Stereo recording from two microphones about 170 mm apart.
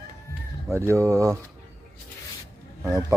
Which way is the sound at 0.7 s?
15° right (ahead or behind).